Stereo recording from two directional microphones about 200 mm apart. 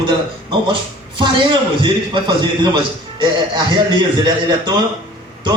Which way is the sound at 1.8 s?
20° right (ahead or behind).